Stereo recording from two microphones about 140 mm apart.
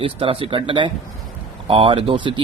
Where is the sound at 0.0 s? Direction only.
40° right (ahead or behind).